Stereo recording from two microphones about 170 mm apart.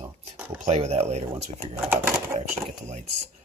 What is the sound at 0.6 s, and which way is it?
Speech, 40° right (ahead or behind).